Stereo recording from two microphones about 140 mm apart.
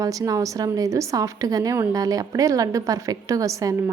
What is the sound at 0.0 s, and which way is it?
A woman's voice, 25° right (ahead or behind).